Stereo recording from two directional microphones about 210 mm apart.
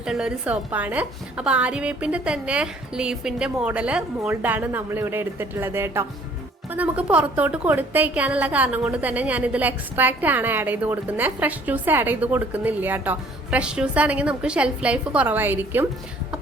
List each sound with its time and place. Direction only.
0.0 s a woman's voice: 5° right (ahead or behind)